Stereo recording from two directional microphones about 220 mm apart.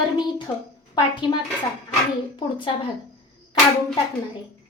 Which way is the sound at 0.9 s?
20° left (ahead or behind).